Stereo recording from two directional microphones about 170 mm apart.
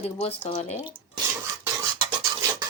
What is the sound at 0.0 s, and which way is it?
Speech, 40° left (ahead or behind).